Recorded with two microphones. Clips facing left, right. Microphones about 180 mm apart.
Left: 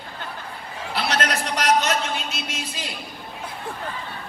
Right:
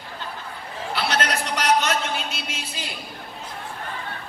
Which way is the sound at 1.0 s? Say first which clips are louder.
Even; 35° right (ahead or behind).